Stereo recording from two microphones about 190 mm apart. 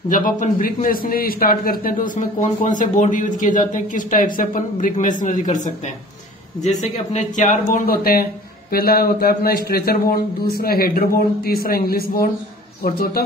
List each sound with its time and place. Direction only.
0.1 s a man's voice: 45° left (ahead or behind)
6.6 s a man's voice: 40° left (ahead or behind)